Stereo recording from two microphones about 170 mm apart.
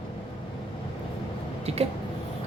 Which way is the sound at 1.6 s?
35° right (ahead or behind).